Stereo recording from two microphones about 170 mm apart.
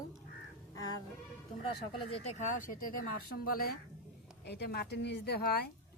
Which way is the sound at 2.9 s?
55° left (ahead or behind).